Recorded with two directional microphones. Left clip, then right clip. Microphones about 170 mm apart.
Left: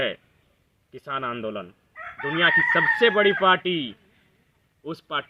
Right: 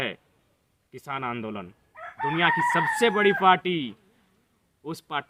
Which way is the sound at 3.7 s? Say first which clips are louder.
Left 2 dB; 65° right (ahead or behind).